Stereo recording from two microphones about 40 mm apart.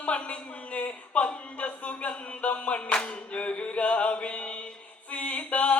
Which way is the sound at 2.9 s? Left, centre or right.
Left.